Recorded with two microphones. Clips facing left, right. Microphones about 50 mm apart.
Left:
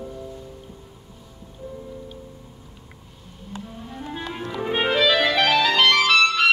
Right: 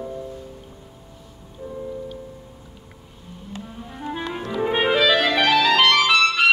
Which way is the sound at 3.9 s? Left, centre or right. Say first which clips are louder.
Right 3 dB; centre.